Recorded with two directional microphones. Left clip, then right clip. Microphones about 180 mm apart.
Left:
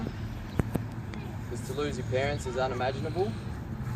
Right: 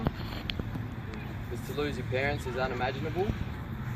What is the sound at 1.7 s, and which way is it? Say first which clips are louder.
Speech: left 1 dB; 10° right (ahead or behind).